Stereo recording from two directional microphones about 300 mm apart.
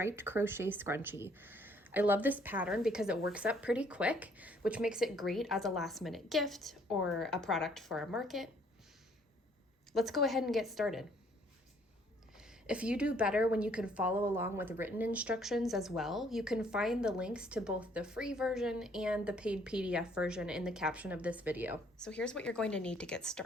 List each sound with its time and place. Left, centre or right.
0.0 s a woman's voice: centre
9.9 s a woman's voice: centre
12.6 s a woman's voice: centre